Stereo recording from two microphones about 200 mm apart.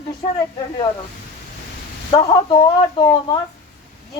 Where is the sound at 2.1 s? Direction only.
25° left (ahead or behind).